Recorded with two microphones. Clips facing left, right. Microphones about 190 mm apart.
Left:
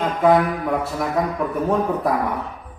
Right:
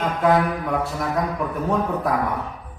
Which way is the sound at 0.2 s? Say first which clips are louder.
Left 3 dB; centre (ahead or behind).